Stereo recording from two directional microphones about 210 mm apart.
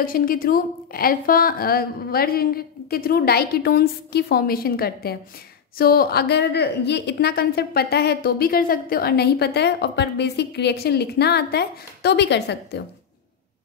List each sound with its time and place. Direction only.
0.0 s a woman's voice: 40° left (ahead or behind)